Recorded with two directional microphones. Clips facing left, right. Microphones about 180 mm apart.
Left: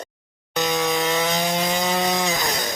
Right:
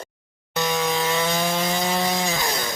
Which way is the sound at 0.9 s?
20° left (ahead or behind).